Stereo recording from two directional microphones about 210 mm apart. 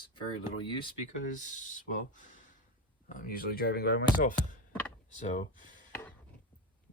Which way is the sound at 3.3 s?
45° left (ahead or behind).